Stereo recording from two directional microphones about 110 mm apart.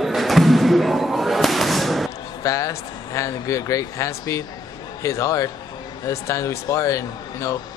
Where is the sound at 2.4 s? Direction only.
30° left (ahead or behind).